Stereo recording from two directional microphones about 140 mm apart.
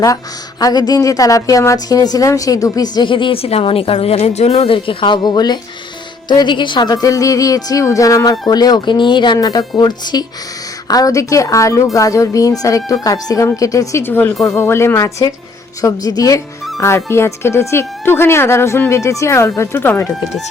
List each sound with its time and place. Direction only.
0.6 s a woman's voice: 30° left (ahead or behind)